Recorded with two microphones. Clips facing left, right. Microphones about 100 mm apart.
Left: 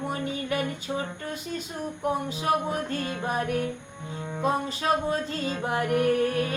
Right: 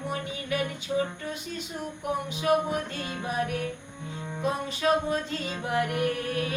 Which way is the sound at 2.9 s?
40° left (ahead or behind).